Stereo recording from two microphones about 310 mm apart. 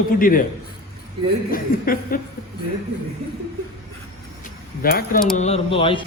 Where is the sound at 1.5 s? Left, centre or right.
Left.